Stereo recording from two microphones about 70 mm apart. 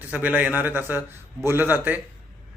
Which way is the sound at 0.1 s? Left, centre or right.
Centre.